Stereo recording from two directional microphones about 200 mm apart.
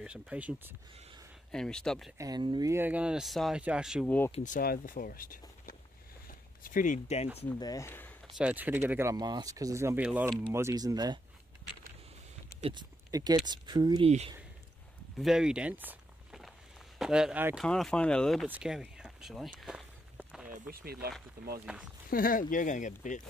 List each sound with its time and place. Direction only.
0.0 s speech: 5° right (ahead or behind)
2.1 s speech: 20° right (ahead or behind); by 4.1 s 5° right (ahead or behind)
4.3 s speech: 40° left (ahead or behind)
7.5 s speech: 15° left (ahead or behind)
8.4 s speech: 5° right (ahead or behind)
12.5 s a sound: 25° right (ahead or behind)
13.5 s speech: 20° right (ahead or behind)
15.1 s walk: 5° right (ahead or behind)
17.0 s speech: 5° right (ahead or behind)
17.6 s speech: 5° left (ahead or behind)
19.6 s walk: centre (ahead or behind)
20.4 s speech: 45° right (ahead or behind)
21.6 s speech: 5° right (ahead or behind)
22.1 s speech: 45° left (ahead or behind)